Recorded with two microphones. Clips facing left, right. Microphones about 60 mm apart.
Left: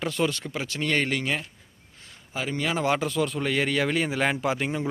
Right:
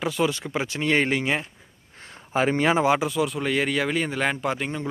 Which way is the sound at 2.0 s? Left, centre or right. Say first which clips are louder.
Right 9 dB; right.